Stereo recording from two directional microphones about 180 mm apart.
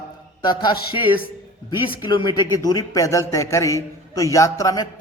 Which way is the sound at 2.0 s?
25° left (ahead or behind).